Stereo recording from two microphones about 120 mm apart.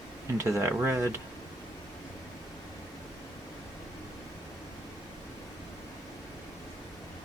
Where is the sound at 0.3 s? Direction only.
25° right (ahead or behind).